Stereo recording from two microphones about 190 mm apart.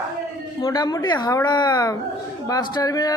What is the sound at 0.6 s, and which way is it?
A woman's voice, 20° left (ahead or behind).